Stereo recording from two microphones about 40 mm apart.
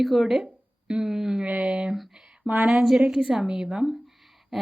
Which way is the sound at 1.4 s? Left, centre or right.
Right.